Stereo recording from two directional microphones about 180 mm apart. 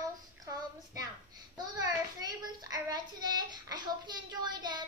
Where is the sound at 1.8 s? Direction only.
20° right (ahead or behind).